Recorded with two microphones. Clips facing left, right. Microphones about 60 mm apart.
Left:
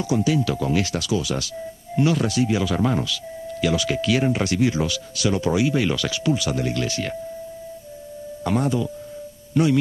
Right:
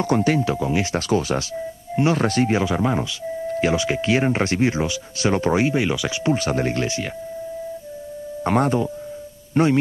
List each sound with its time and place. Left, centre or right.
0.0 s speech: right
0.6 s speech: centre
0.9 s speech: right
2.6 s speech: right
3.4 s speech: right
6.2 s speech: right
8.5 s speech: right